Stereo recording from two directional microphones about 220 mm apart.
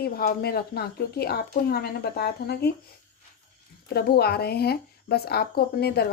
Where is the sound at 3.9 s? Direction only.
45° left (ahead or behind).